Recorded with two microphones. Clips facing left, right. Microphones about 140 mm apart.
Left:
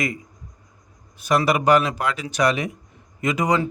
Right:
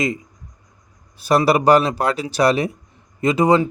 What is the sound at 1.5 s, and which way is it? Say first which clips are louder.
A man's voice: right 4 dB; 35° right (ahead or behind).